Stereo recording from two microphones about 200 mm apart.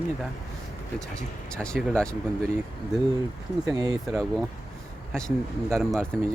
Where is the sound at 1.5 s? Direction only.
5° left (ahead or behind).